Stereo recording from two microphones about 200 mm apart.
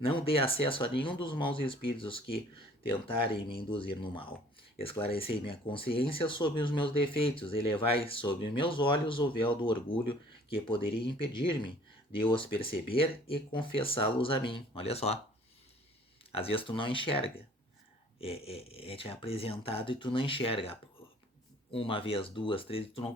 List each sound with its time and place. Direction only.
0.0 s speech: 25° left (ahead or behind)
16.3 s speech: 30° left (ahead or behind)